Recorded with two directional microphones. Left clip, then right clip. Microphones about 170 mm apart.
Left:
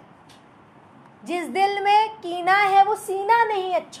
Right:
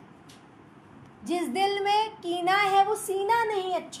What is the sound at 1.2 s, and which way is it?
A child's voice, 25° left (ahead or behind).